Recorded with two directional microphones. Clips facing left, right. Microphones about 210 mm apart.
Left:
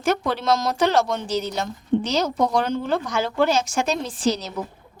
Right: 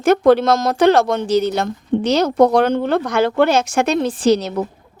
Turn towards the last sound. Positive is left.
turn(degrees=-60)  # may be behind; listen again after turning